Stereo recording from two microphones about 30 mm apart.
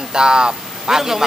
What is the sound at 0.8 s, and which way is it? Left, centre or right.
Speech, centre.